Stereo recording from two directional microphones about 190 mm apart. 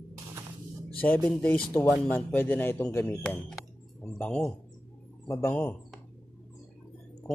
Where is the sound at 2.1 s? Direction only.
10° left (ahead or behind).